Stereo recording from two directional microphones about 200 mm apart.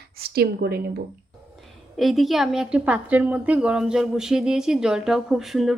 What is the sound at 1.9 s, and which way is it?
A woman's voice, centre (ahead or behind).